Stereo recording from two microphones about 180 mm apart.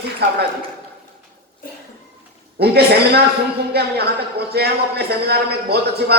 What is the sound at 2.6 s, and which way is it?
Speech, 65° right (ahead or behind).